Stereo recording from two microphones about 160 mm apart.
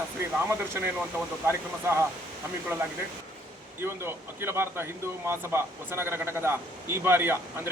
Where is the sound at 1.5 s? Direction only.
15° right (ahead or behind).